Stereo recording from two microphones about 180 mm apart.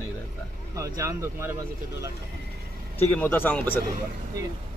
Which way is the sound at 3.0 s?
10° left (ahead or behind).